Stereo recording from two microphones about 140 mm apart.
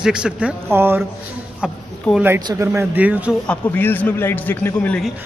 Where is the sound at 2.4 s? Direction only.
25° right (ahead or behind).